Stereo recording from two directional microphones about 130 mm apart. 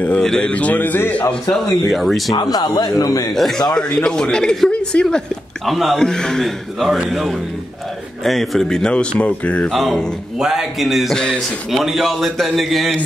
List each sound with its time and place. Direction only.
0.0 s a man's voice: 5° left (ahead or behind)
1.5 s speech: centre (ahead or behind)
2.3 s a man's voice: 35° left (ahead or behind)
3.3 s speech: centre (ahead or behind)
9.7 s speech: centre (ahead or behind)